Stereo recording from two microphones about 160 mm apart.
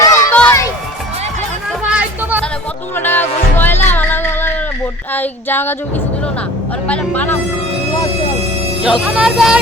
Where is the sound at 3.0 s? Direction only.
10° left (ahead or behind).